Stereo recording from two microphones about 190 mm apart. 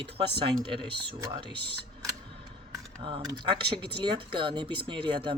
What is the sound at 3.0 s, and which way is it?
Speech, 25° right (ahead or behind).